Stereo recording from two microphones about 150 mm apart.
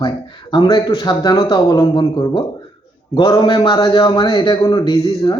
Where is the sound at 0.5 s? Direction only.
30° left (ahead or behind).